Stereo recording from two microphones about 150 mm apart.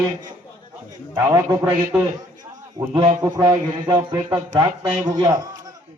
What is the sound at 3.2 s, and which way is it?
Speech, 20° right (ahead or behind).